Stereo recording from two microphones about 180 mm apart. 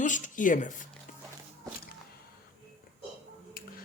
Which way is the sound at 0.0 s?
45° left (ahead or behind).